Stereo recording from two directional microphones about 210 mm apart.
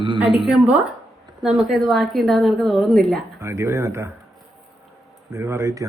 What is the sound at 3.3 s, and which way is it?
Speech, 15° right (ahead or behind).